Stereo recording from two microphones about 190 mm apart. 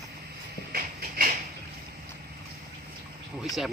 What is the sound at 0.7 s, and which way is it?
Shuffle, 55° right (ahead or behind).